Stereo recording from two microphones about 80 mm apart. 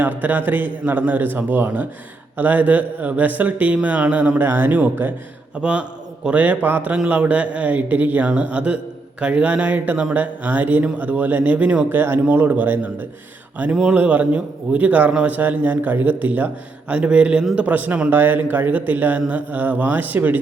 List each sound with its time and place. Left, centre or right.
0.0 s a man's voice: right
6.9 s a man's voice: centre
13.7 s a man's voice: centre